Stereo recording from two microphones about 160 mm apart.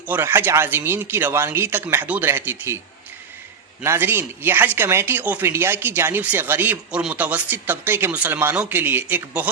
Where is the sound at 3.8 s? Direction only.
15° right (ahead or behind).